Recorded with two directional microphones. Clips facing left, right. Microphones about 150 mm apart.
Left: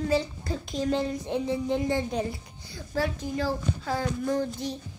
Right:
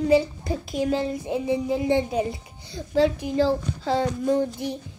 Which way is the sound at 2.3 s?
20° right (ahead or behind).